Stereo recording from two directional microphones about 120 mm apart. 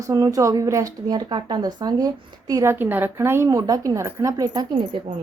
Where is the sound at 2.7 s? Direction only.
15° right (ahead or behind).